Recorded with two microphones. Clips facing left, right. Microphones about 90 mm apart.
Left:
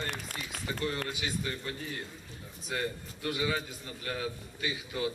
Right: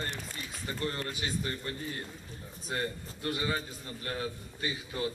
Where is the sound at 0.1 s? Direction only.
70° left (ahead or behind).